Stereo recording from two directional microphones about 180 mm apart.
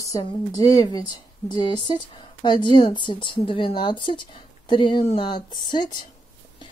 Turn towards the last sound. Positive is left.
turn(degrees=25)  # may be behind; listen again after turning